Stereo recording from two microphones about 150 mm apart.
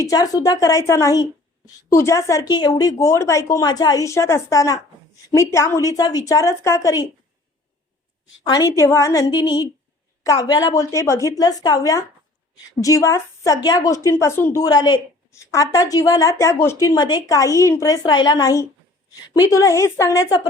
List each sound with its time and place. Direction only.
0.0 s speech: 25° left (ahead or behind)
8.4 s speech: 25° left (ahead or behind)